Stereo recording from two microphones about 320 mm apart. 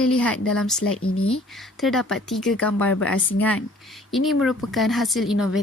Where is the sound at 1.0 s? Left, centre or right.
Left.